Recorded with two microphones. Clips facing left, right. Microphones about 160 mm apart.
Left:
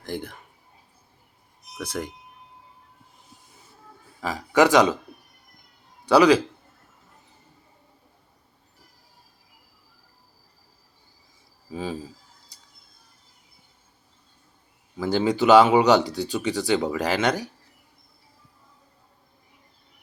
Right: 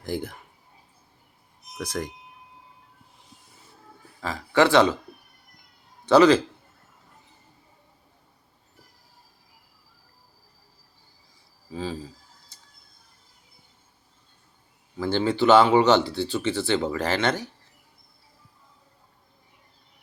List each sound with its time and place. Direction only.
0.0 s speech: 5° right (ahead or behind)
2.0 s speech: 5° left (ahead or behind)
4.2 s speech: 15° left (ahead or behind)
6.1 s speech: 10° left (ahead or behind)
11.7 s speech: 15° left (ahead or behind)
14.9 s speech: 10° left (ahead or behind)